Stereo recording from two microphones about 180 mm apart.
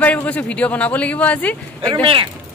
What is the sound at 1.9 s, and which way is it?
Speech, 30° right (ahead or behind).